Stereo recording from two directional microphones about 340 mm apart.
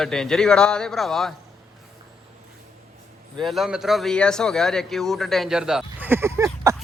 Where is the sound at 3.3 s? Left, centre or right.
Centre.